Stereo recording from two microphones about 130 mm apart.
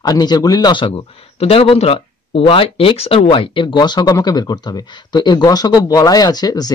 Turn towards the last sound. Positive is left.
turn(degrees=30)  # may be behind; listen again after turning